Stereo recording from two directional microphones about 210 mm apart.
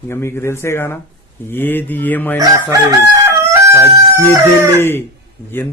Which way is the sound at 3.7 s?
10° right (ahead or behind).